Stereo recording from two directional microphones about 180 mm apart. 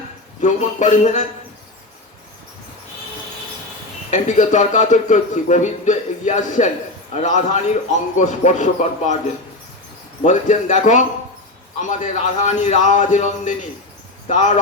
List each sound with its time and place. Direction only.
0.4 s a man's voice: 40° left (ahead or behind)
4.1 s a man's voice: 40° left (ahead or behind)
10.2 s a man's voice: 40° left (ahead or behind)